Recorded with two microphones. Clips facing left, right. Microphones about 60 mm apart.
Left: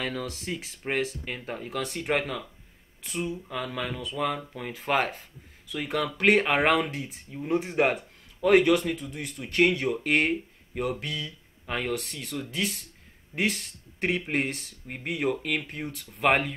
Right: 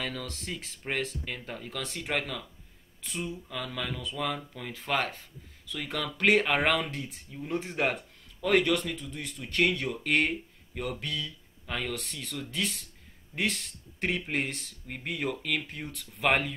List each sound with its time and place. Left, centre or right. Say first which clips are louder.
0.0 s speech: left 4 dB; centre
1.5 s speech: left 8 dB; centre
3.0 s speech: left 4 dB; centre
3.4 s speech: left 3 dB; left
6.4 s speech: left 3 dB; centre
7.2 s speech: left 7 dB; left
8.5 s speech: left 5 dB; centre
11.6 s speech: left 3 dB; centre
11.9 s speech: left 5 dB; centre
15.3 s speech: left 2 dB; centre
15.6 s speech: left 4 dB; centre